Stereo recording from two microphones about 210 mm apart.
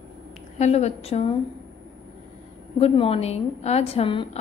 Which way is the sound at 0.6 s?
30° left (ahead or behind).